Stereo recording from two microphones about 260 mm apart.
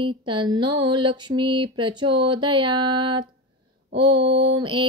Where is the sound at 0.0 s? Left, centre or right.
Centre.